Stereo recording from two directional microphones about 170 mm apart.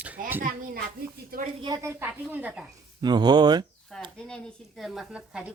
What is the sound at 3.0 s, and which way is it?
Speech, 25° right (ahead or behind).